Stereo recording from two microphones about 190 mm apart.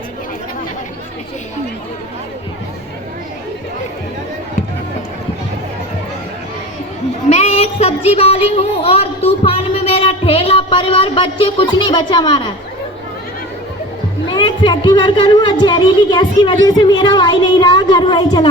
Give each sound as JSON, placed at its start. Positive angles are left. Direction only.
{"t": 7.3, "sound": "child singing", "side_deg": 35}
{"t": 14.3, "sound": "speech", "side_deg": 25}